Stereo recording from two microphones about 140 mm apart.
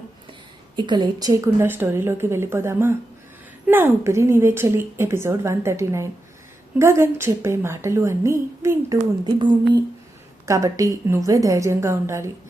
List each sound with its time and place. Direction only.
0.8 s a woman's voice: 35° right (ahead or behind)
9.2 s a woman's voice: 30° right (ahead or behind)